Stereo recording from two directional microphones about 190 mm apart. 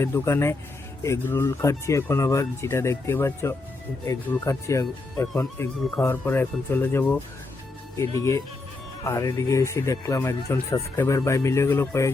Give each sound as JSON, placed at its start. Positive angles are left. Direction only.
{"t": 0.0, "sound": "speech", "side_deg": 15}
{"t": 5.3, "sound": "speech", "side_deg": 5}
{"t": 8.2, "sound": "speech", "side_deg": 15}